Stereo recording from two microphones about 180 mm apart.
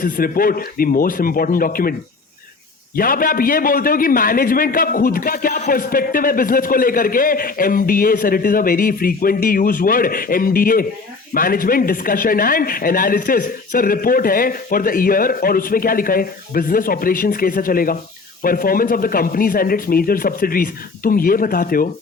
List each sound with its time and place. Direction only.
0.0 s a man's voice: 50° left (ahead or behind)